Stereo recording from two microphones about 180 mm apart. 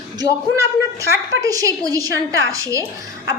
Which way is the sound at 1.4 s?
20° right (ahead or behind).